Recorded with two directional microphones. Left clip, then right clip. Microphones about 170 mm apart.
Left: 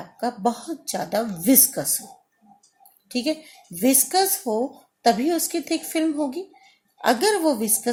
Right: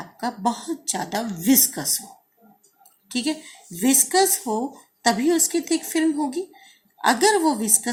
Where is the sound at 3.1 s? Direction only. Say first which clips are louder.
Left 1 dB; 50° left (ahead or behind).